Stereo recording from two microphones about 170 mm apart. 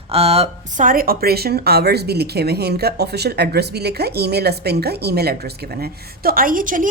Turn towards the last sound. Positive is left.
turn(degrees=-50)  # may be behind; listen again after turning